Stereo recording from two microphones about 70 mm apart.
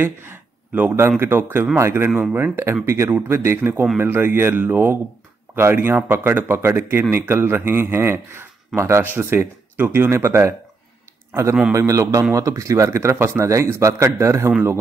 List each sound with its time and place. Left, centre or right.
0.0 s a man's voice: right
11.7 s speech: right